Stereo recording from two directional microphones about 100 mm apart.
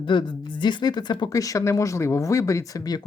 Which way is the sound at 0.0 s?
55° left (ahead or behind).